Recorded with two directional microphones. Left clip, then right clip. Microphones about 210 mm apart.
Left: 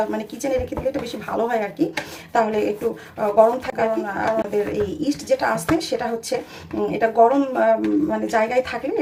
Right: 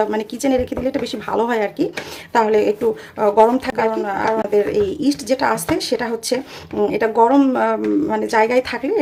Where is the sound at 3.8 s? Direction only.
40° right (ahead or behind).